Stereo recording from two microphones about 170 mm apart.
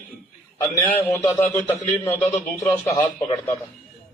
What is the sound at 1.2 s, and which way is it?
Speech, 15° left (ahead or behind).